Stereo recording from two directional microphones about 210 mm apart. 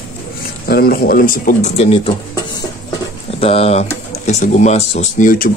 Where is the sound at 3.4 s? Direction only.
30° left (ahead or behind).